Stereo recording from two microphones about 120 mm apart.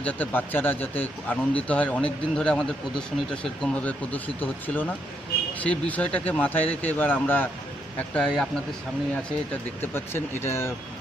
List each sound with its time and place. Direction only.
0.0 s speech: 15° left (ahead or behind)
5.6 s speech: 10° left (ahead or behind)
9.8 s speech: 20° left (ahead or behind)